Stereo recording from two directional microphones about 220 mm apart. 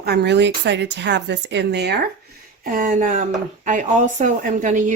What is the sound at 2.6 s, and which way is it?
A woman's voice, 35° right (ahead or behind).